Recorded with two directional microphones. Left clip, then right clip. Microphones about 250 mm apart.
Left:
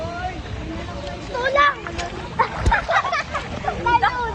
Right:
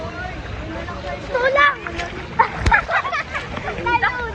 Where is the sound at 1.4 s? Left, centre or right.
Centre.